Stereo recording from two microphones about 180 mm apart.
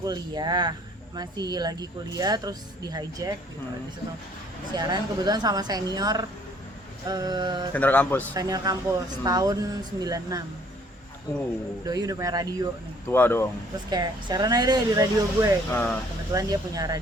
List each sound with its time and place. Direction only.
0.0 s speech: 20° right (ahead or behind)
4.7 s speech: 20° right (ahead or behind)
7.7 s speech: 10° left (ahead or behind)
8.3 s speech: 20° right (ahead or behind)
11.9 s speech: 20° right (ahead or behind)
13.1 s speech: 10° left (ahead or behind)
13.9 s speech: 20° right (ahead or behind)
15.7 s speech: 10° left (ahead or behind)
16.3 s speech: 20° right (ahead or behind)